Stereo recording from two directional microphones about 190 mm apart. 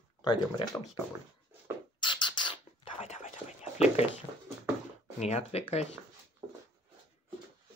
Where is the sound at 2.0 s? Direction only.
25° left (ahead or behind).